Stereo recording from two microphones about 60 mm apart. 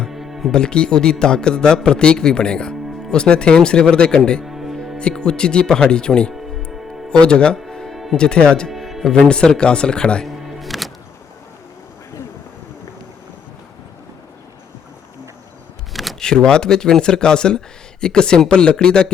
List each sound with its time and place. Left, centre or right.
0.1 s music: centre
0.5 s a man's voice: centre
4.4 s music: centre
4.9 s a man's voice: centre
7.5 s music: centre
8.1 s a man's voice: centre
8.7 s music: centre
9.1 s a man's voice: centre
10.2 s music: centre
15.9 s a sound: centre
16.2 s a man's voice: centre